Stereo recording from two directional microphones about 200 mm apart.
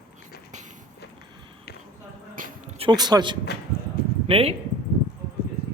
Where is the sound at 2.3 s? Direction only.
40° right (ahead or behind); by 3.3 s 20° right (ahead or behind).